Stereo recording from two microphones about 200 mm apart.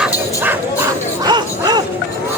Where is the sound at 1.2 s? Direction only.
20° right (ahead or behind).